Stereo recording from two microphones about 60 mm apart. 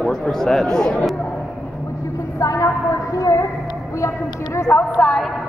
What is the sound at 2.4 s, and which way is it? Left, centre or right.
Speech, left.